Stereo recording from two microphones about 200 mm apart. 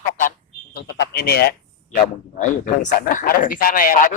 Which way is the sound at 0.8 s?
55° left (ahead or behind).